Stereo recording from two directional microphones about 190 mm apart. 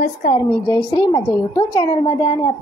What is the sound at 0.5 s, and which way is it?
A woman's voice, 15° left (ahead or behind).